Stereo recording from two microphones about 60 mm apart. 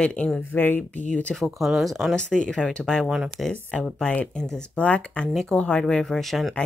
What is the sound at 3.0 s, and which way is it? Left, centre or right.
Speech, centre.